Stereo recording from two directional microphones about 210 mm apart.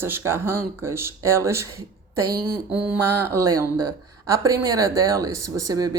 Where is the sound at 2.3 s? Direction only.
45° right (ahead or behind).